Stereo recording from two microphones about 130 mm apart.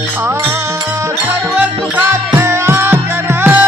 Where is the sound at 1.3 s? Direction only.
15° right (ahead or behind).